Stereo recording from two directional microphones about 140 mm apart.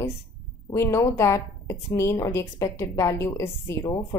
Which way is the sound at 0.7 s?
20° left (ahead or behind).